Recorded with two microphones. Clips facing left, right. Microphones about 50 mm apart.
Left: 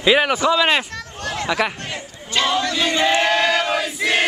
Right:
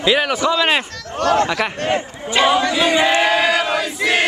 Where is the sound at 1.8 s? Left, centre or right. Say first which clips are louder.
Right 11 dB; right.